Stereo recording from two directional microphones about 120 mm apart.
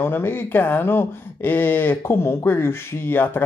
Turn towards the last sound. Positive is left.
turn(degrees=15)  # may be behind; listen again after turning